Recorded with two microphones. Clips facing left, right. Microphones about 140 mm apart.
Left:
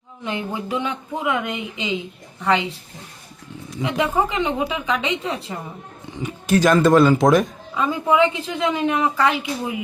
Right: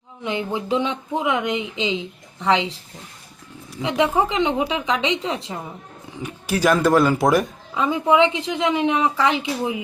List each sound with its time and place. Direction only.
0.3 s speech: 20° right (ahead or behind)
3.8 s speech: 20° right (ahead or behind)
6.1 s speech: 5° right (ahead or behind)
7.9 s speech: 20° right (ahead or behind)